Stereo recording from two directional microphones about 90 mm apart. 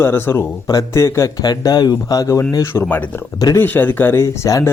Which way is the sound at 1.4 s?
50° left (ahead or behind).